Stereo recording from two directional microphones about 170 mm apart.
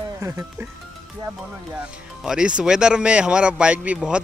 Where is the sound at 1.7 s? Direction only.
5° right (ahead or behind).